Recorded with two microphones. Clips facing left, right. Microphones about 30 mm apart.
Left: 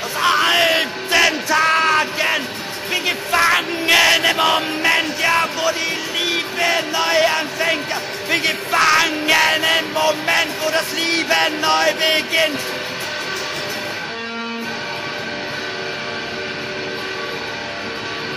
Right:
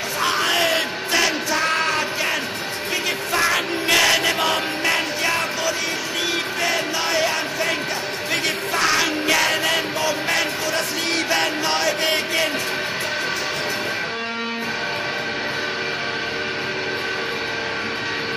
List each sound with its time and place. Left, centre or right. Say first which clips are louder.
0.2 s music: left 5 dB; centre
1.1 s music: left 5 dB; centre
2.9 s music: left 4 dB; centre